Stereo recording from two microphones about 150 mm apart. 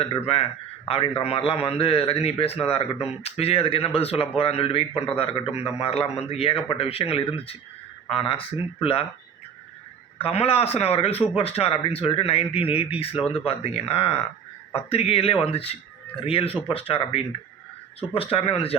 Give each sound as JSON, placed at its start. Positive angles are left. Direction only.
{"t": 0.9, "sound": "a man's voice", "side_deg": 40}
{"t": 10.2, "sound": "a man's voice", "side_deg": 40}